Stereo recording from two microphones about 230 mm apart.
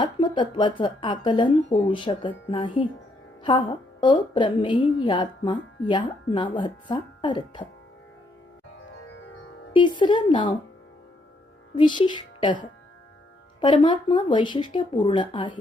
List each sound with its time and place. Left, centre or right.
0.0 s a woman's voice: centre
9.7 s a woman's voice: centre
11.8 s a woman's voice: centre